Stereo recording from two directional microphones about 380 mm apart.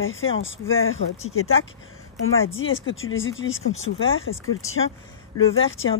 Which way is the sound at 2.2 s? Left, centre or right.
Left.